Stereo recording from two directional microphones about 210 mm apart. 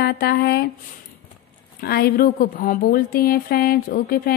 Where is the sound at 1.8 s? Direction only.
45° left (ahead or behind).